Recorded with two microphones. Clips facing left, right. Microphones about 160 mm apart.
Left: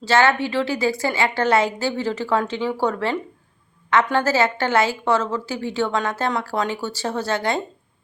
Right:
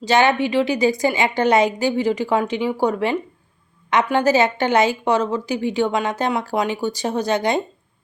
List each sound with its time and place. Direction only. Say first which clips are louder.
0.0 s a woman's voice: right 1 dB; 20° right (ahead or behind)